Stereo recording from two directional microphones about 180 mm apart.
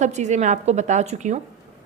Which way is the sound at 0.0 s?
40° right (ahead or behind).